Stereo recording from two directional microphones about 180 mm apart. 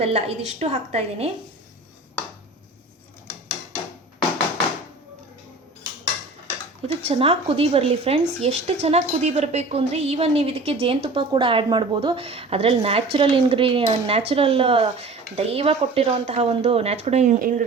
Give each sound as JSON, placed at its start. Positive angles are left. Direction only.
{"t": 0.0, "sound": "speech", "side_deg": -35}
{"t": 6.8, "sound": "speech", "side_deg": -35}